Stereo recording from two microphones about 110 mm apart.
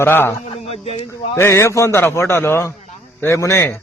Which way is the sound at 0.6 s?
65° left (ahead or behind).